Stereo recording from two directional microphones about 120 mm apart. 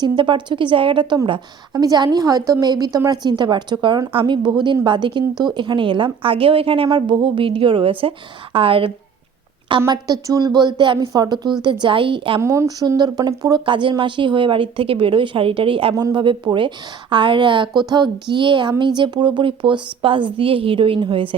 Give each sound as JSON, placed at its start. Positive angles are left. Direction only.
{"t": 0.2, "sound": "a woman's voice", "side_deg": -40}
{"t": 9.9, "sound": "a woman's voice", "side_deg": -30}
{"t": 12.4, "sound": "a woman's voice", "side_deg": -25}
{"t": 16.0, "sound": "a woman's voice", "side_deg": -35}